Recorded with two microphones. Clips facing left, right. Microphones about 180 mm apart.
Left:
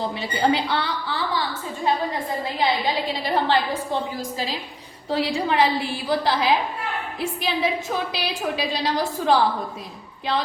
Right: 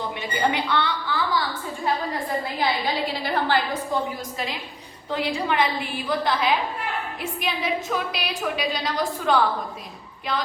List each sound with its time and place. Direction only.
0.0 s a woman's voice: 35° left (ahead or behind)
5.0 s a woman's voice: 30° left (ahead or behind)